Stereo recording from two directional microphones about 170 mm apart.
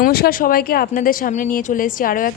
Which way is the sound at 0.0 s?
60° left (ahead or behind).